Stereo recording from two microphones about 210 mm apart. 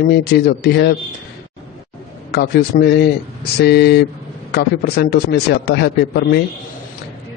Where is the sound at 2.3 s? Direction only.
50° left (ahead or behind).